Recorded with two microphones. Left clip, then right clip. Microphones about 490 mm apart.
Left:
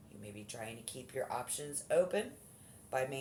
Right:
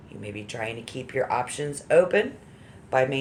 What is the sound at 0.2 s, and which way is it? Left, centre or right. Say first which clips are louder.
Speech: right 14 dB; left.